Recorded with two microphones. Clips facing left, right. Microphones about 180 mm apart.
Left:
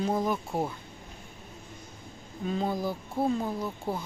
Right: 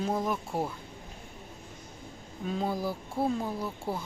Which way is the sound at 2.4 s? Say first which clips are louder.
Left 1 dB; 5° right (ahead or behind).